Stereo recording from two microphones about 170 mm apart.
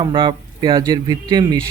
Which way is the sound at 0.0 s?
30° right (ahead or behind).